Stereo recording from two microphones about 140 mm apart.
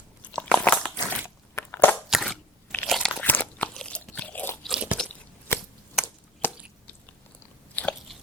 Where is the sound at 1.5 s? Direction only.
15° left (ahead or behind).